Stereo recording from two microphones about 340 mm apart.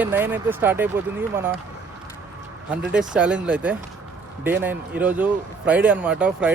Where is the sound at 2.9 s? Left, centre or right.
Centre.